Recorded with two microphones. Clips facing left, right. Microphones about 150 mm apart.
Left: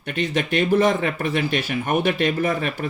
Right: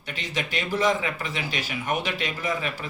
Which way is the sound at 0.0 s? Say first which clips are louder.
Left 8 dB; 55° left (ahead or behind).